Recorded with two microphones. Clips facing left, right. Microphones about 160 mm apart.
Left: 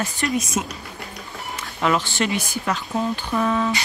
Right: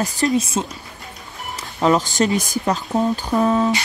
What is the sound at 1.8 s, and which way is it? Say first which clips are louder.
Speech: right 5 dB; 35° right (ahead or behind).